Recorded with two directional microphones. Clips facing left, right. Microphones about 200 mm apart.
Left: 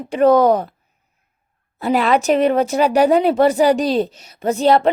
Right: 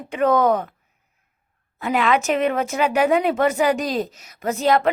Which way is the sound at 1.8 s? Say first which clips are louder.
Left 4 dB; 35° left (ahead or behind).